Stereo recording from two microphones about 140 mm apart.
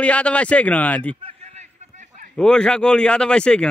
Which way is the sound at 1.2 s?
50° right (ahead or behind).